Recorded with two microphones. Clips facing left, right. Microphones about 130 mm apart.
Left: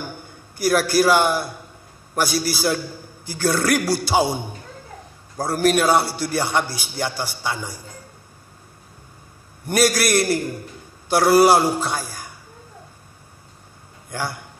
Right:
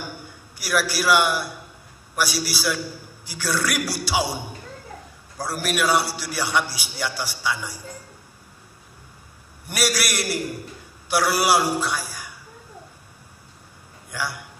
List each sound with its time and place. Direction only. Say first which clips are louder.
0.6 s a man's voice: left 7 dB; 50° left (ahead or behind)
5.5 s a man's voice: left 5 dB; 50° left (ahead or behind)
9.7 s a man's voice: left 7 dB; 50° left (ahead or behind)
11.9 s tambourine: left 2 dB; 50° left (ahead or behind)
14.1 s a man's voice: left 2 dB; 50° left (ahead or behind)